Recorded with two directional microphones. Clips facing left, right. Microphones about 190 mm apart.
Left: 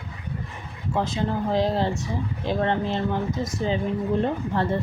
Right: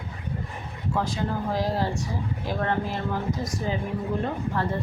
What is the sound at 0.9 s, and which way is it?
Speech, 25° left (ahead or behind).